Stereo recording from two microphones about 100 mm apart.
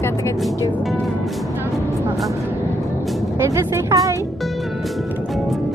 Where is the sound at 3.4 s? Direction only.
30° right (ahead or behind).